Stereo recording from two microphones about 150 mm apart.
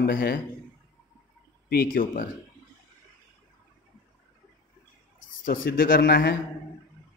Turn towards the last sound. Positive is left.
turn(degrees=85)